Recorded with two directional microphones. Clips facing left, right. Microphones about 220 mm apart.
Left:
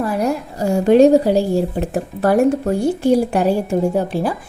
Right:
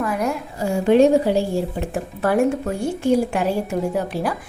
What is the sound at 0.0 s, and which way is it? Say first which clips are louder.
Speech: left 4 dB; 35° left (ahead or behind).